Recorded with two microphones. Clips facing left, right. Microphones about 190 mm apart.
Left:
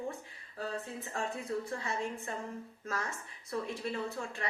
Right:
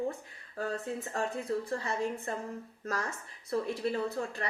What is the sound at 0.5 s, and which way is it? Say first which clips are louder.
Speech: right 4 dB; 45° right (ahead or behind).